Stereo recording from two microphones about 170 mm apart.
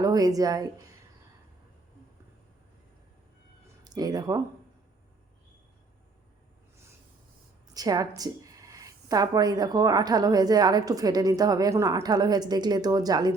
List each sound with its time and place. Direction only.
0.0 s a woman's voice: 20° right (ahead or behind)
3.8 s speech: 25° right (ahead or behind)
7.7 s a woman's voice: 20° right (ahead or behind)